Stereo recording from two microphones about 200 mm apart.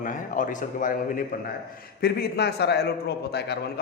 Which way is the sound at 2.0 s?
50° left (ahead or behind).